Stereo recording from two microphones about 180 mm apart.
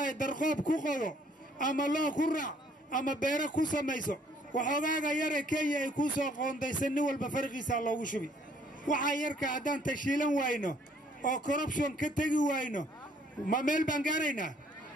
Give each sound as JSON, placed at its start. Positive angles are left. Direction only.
{"t": 0.2, "sound": "a man's voice", "side_deg": 45}